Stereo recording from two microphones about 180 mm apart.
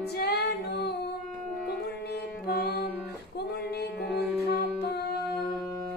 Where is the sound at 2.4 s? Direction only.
60° left (ahead or behind).